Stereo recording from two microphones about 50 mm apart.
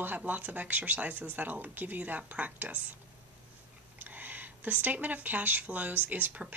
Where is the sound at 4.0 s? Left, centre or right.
Right.